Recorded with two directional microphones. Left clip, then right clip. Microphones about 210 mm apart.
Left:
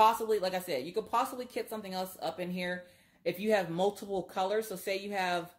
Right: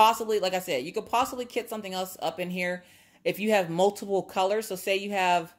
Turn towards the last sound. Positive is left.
turn(degrees=-40)  # may be behind; listen again after turning